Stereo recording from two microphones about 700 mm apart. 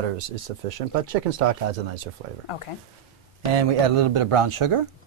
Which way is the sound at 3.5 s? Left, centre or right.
Right.